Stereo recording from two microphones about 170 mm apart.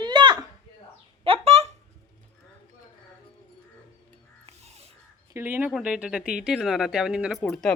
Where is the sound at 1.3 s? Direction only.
35° right (ahead or behind).